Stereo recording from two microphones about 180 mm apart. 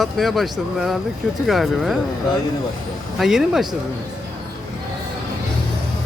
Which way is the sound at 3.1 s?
Centre (ahead or behind).